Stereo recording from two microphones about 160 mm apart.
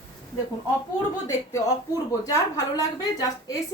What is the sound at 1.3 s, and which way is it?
A woman's voice, 20° left (ahead or behind).